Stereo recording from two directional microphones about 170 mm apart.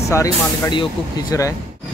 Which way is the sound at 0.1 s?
20° left (ahead or behind).